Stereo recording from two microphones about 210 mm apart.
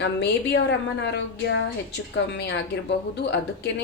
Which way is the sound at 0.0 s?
55° left (ahead or behind).